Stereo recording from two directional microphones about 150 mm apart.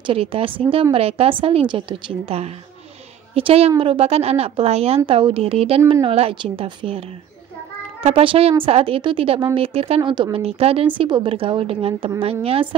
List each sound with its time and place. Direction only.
0.0 s a woman's voice: 40° right (ahead or behind)